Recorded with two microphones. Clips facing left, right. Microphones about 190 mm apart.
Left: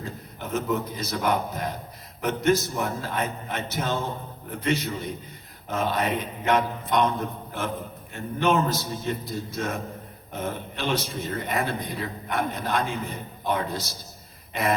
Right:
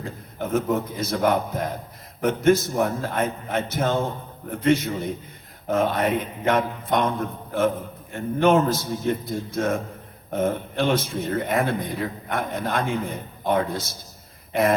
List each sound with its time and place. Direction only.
0.3 s a man's voice: 50° right (ahead or behind)
8.1 s a man's voice: 50° right (ahead or behind)
14.5 s throat clearing: 50° right (ahead or behind)